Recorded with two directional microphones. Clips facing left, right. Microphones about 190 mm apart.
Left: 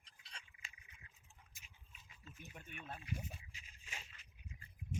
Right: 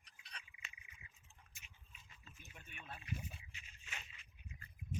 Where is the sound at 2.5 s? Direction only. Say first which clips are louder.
Left 3 dB; 45° left (ahead or behind).